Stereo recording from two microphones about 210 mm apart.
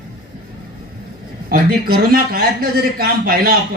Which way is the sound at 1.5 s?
45° right (ahead or behind).